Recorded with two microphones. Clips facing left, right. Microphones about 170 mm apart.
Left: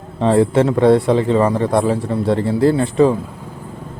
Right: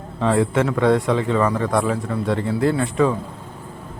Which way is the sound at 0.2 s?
30° left (ahead or behind).